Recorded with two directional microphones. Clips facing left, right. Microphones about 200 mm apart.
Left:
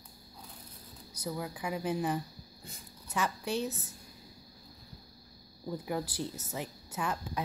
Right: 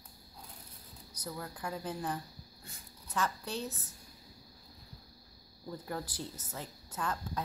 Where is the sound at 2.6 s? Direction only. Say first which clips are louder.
Left 5 dB; 10° left (ahead or behind).